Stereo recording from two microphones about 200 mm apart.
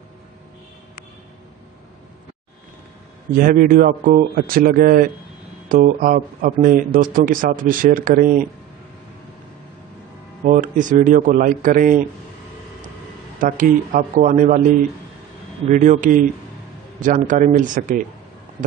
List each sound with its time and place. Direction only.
3.3 s speech: 45° right (ahead or behind)
10.4 s speech: 40° right (ahead or behind)
13.4 s speech: 40° right (ahead or behind)
15.7 s speech: 40° right (ahead or behind)